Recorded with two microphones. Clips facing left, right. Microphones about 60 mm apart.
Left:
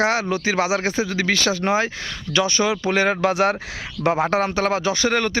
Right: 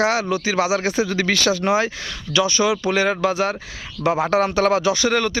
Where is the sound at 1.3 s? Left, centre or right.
Left.